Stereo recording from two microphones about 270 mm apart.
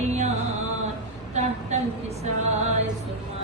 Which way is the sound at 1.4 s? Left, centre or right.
Right.